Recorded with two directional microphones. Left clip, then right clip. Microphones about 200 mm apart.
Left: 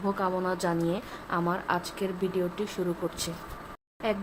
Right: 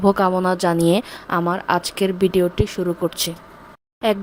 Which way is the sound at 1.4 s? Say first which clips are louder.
Right 9 dB; 40° right (ahead or behind).